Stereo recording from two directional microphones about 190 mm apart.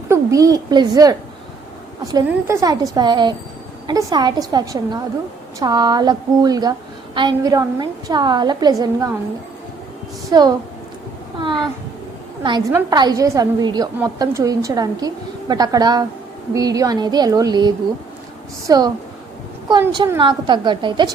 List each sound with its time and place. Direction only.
0.1 s a child's voice: 15° right (ahead or behind)
10.2 s a woman's voice: 20° right (ahead or behind)
20.1 s a woman's voice: 25° right (ahead or behind)